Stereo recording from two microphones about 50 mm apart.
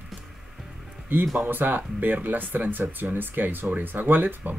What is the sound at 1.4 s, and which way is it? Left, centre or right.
Speech, right.